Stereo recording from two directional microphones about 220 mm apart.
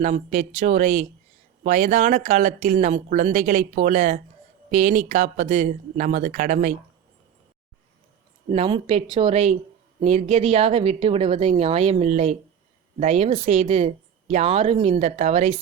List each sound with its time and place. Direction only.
0.0 s speech: 30° right (ahead or behind)
8.4 s a woman's voice: 25° right (ahead or behind)